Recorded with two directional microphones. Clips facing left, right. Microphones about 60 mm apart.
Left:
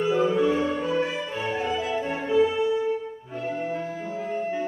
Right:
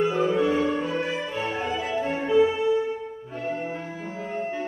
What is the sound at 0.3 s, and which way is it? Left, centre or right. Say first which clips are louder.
Music: even; right.